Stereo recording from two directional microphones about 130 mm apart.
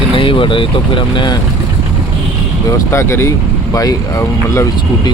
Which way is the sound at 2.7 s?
20° left (ahead or behind).